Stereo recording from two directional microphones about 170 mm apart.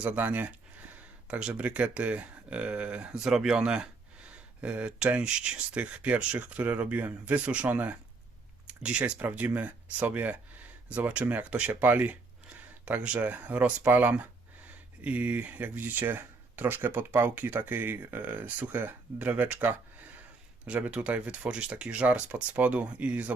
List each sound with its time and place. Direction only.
0.0 s speech: 10° right (ahead or behind)